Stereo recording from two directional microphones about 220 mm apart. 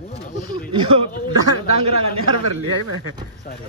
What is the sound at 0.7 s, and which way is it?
Speech, 20° right (ahead or behind).